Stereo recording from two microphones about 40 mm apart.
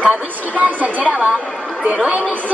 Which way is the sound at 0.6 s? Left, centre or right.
Right.